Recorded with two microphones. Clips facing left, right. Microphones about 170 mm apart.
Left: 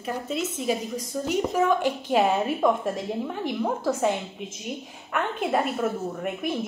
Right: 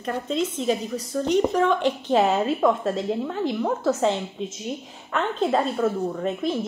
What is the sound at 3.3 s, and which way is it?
A woman's voice, 15° left (ahead or behind).